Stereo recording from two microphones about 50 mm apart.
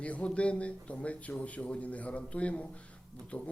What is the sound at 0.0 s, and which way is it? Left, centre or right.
Speech, left.